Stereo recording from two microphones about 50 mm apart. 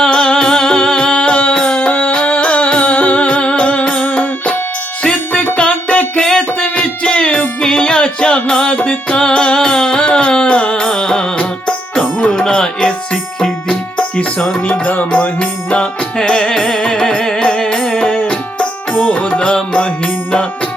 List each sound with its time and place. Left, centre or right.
0.0 s music: centre
1.9 s music: left; by 8.7 s centre
8.7 s music: left; by 12.9 s centre
14.2 s music: left
18.1 s music: left